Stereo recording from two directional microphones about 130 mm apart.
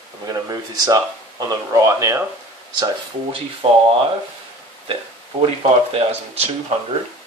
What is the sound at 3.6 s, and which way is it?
Speech, 50° right (ahead or behind).